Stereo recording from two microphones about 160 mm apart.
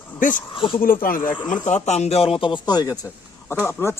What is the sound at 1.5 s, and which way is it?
Speech, 45° left (ahead or behind).